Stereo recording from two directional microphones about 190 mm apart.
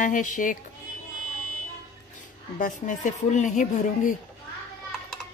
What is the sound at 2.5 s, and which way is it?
Speech, 40° left (ahead or behind).